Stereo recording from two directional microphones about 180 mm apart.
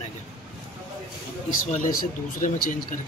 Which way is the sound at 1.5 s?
45° left (ahead or behind).